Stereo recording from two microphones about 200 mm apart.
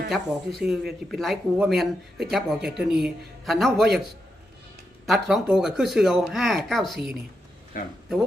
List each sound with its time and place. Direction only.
0.1 s speech: 5° right (ahead or behind)
5.0 s speech: centre (ahead or behind)